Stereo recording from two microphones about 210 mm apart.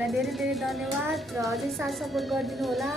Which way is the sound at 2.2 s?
Centre (ahead or behind).